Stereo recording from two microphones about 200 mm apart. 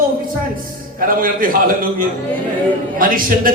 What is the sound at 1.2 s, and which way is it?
Speech, 45° right (ahead or behind).